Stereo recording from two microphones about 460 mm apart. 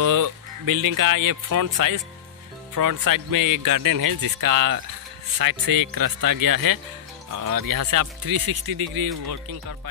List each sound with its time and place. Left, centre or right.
0.0 s speech: right
2.7 s speech: right